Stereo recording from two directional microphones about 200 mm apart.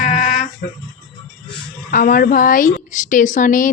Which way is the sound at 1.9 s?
45° left (ahead or behind).